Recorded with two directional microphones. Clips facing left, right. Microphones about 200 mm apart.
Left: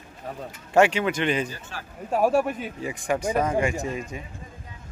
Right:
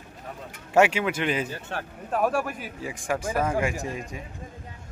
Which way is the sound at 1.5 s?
60° right (ahead or behind).